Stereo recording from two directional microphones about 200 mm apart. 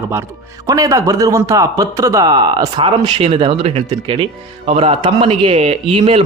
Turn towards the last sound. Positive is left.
turn(degrees=-30)  # may be behind; listen again after turning